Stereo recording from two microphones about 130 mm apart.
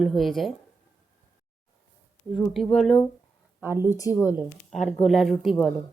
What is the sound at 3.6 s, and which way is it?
Speech, 20° right (ahead or behind).